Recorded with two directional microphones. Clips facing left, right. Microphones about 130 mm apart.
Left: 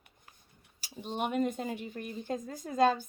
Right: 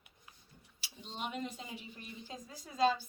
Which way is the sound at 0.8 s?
55° left (ahead or behind).